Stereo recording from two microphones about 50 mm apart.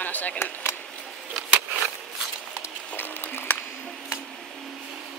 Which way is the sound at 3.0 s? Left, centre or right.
Left.